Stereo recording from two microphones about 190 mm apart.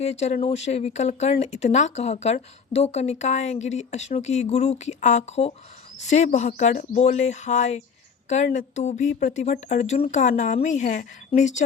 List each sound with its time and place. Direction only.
0.0 s speech: 35° left (ahead or behind)